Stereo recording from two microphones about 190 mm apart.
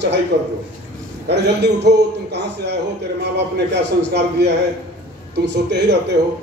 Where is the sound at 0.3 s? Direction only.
65° right (ahead or behind).